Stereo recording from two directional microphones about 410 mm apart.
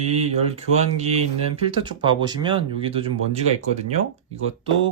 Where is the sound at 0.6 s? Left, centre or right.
Centre.